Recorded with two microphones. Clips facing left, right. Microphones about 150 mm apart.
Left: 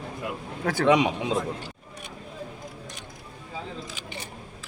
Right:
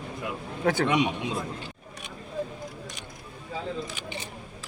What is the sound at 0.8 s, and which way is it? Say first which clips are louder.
Speech: left 4 dB; 90° left.